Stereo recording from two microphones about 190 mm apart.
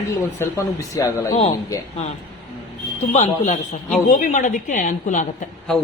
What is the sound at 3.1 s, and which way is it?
A woman's voice, 40° left (ahead or behind).